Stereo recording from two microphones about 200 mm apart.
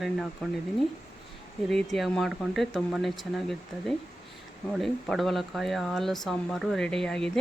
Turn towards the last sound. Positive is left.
turn(degrees=5)  # may be behind; listen again after turning